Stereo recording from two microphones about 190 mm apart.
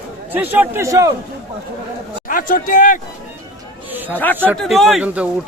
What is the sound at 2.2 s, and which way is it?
Speech, 45° left (ahead or behind).